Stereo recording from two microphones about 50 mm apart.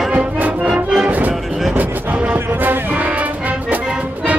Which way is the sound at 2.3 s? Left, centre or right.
Right.